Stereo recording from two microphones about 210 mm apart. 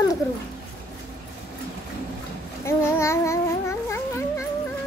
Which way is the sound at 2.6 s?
15° left (ahead or behind).